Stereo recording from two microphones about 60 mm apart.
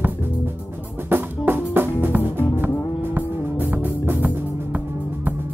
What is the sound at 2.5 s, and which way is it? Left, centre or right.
Music, right.